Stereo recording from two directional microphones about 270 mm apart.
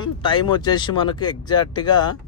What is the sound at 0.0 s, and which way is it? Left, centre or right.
Speech, centre.